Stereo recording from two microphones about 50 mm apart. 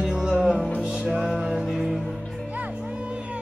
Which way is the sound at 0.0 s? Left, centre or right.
Centre.